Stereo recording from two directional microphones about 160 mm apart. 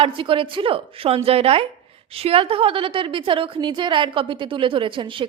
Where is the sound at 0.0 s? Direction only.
35° right (ahead or behind).